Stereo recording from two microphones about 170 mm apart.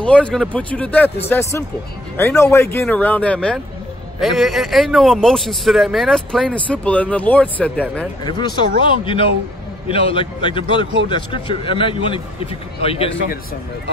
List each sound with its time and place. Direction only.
0.0 s speech: 5° left (ahead or behind)
8.3 s a man's voice: 25° left (ahead or behind)